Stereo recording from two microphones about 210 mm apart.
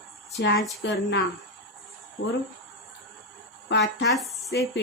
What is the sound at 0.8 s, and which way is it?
Speech, 55° left (ahead or behind).